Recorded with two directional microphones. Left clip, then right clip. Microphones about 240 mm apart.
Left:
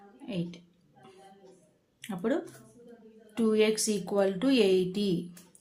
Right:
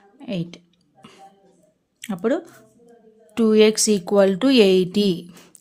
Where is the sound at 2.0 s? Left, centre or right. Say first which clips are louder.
Right 9 dB; right.